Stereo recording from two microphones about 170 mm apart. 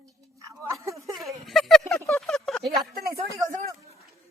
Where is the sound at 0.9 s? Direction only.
Centre (ahead or behind).